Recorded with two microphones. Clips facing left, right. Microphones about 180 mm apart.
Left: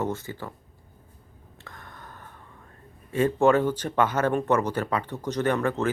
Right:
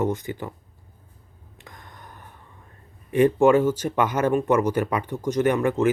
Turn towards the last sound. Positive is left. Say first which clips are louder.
# right 4 dB
turn(degrees=-15)  # may be behind; listen again after turning